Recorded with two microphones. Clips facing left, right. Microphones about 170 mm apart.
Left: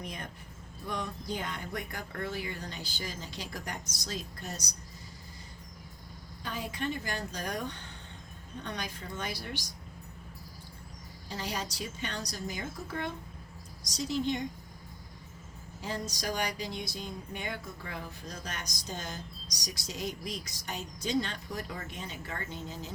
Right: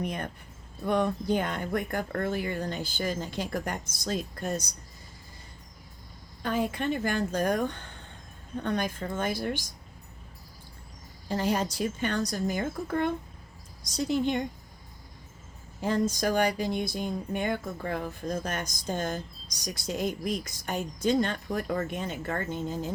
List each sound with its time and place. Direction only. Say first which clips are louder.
0.0 s a woman's voice: right 8 dB; 60° right (ahead or behind)
6.4 s a woman's voice: right 7 dB; 60° right (ahead or behind)
11.3 s a woman's voice: right 9 dB; 55° right (ahead or behind)
15.8 s speech: right 10 dB; 50° right (ahead or behind)